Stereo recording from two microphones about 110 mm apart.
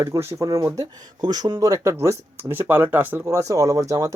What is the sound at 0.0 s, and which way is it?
Speech, 25° right (ahead or behind).